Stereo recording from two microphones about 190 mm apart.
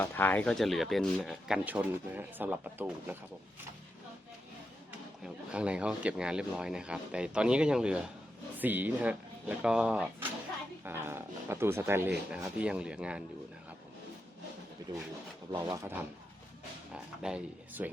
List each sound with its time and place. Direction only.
0.0 s speech: 10° left (ahead or behind); by 3.2 s 10° right (ahead or behind)
4.9 s speech: 5° right (ahead or behind)
15.5 s speech: 15° right (ahead or behind)